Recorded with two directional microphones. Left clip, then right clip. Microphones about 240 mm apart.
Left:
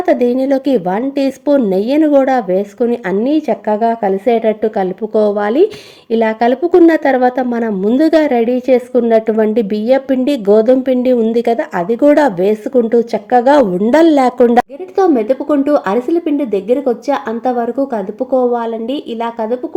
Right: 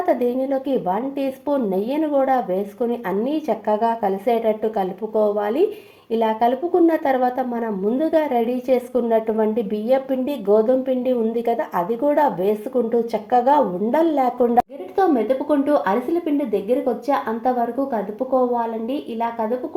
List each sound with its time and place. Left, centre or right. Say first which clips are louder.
0.0 s a woman's voice: left 7 dB; left
18.5 s speech: left 6 dB; left